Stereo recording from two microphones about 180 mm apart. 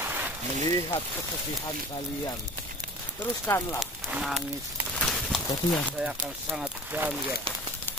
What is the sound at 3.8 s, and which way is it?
Speech, centre (ahead or behind).